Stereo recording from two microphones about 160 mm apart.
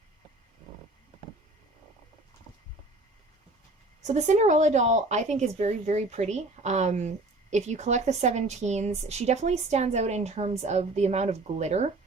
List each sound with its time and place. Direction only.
4.0 s speech: 45° right (ahead or behind)